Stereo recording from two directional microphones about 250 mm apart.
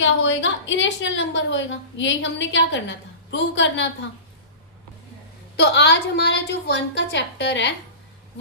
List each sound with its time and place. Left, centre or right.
0.0 s a woman's voice: left
5.5 s a woman's voice: left